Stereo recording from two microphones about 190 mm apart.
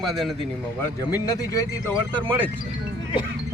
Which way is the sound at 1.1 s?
15° left (ahead or behind).